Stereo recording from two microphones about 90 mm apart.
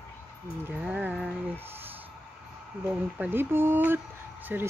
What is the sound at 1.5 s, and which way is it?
Speech, 25° right (ahead or behind).